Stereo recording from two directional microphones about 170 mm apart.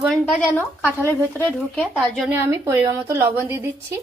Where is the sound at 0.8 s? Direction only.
10° left (ahead or behind).